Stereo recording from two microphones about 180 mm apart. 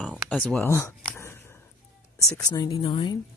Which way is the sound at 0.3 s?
5° left (ahead or behind).